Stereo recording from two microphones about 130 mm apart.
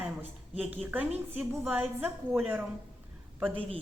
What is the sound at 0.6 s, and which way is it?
Speech, 10° right (ahead or behind).